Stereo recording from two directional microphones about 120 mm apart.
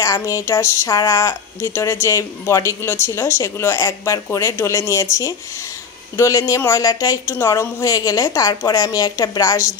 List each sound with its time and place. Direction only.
0.0 s speech: 25° left (ahead or behind)